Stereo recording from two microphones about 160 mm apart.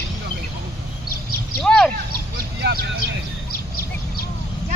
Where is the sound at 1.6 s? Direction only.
5° left (ahead or behind).